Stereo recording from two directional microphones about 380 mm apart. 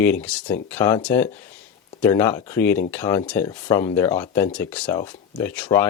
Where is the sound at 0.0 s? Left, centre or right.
Centre.